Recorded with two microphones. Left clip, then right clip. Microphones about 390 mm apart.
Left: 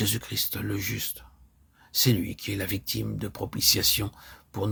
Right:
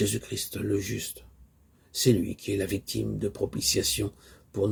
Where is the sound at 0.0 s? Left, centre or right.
Left.